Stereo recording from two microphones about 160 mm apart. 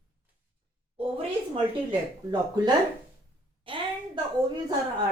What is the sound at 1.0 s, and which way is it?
Speech, 35° right (ahead or behind).